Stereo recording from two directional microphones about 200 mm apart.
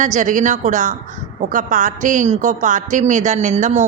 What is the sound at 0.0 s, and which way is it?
A woman's voice, 40° right (ahead or behind).